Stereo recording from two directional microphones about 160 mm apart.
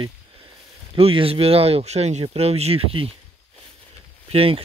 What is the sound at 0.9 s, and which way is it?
Speech, 35° right (ahead or behind).